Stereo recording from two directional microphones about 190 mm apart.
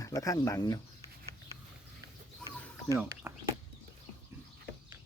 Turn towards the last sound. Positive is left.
turn(degrees=-15)  # may be behind; listen again after turning